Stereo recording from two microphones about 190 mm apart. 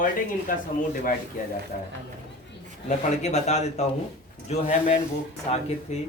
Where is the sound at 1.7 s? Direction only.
45° left (ahead or behind).